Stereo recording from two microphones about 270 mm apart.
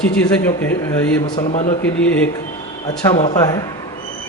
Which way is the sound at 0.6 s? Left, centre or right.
Centre.